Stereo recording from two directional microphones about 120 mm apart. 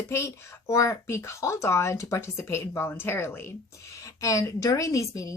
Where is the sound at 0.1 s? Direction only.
25° left (ahead or behind).